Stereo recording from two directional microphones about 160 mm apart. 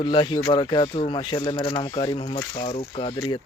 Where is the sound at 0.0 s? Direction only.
30° left (ahead or behind).